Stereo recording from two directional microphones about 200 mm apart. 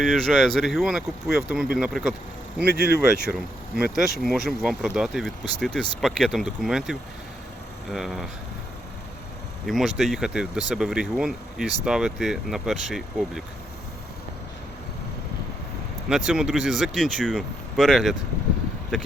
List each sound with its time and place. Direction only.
0.0 s speech: centre (ahead or behind)
2.6 s speech: 50° right (ahead or behind)
2.9 s speech: 50° left (ahead or behind)
3.9 s speech: centre (ahead or behind)
9.6 s speech: centre (ahead or behind)
16.0 s speech: 5° right (ahead or behind)